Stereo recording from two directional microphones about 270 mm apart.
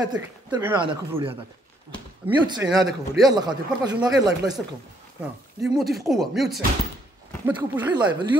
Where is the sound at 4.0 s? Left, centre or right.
Centre.